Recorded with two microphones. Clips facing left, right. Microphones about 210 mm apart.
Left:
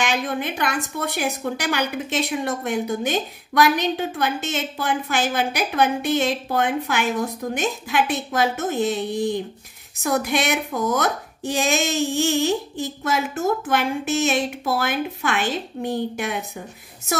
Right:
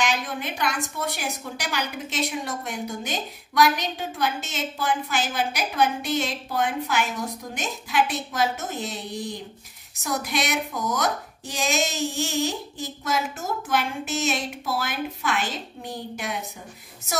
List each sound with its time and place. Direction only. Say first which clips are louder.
0.0 s a woman's voice: left 3 dB; 55° left (ahead or behind)